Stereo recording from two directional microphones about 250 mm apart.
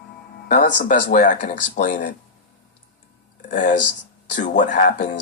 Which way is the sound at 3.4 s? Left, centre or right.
Left.